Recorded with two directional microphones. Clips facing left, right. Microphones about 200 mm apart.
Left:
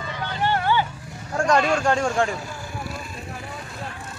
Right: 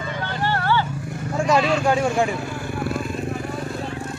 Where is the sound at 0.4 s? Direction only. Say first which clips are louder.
Left 1 dB; 15° left (ahead or behind).